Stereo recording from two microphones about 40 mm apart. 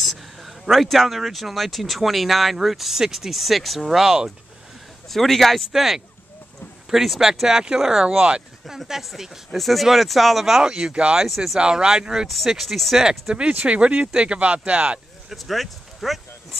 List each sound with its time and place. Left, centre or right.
0.0 s speech: centre
5.0 s speech: centre
5.7 s speech: centre
10.6 s speech: right
11.2 s speech: centre
11.6 s speech: centre
12.4 s speech: centre
13.3 s speech: right
15.2 s speech: centre